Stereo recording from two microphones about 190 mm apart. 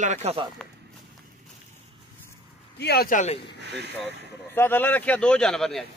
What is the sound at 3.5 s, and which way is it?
Speech, 65° right (ahead or behind).